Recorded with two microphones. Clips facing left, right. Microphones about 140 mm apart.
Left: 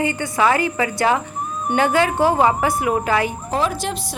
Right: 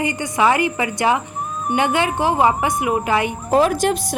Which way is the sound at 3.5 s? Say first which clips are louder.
Right 10 dB; 50° right (ahead or behind).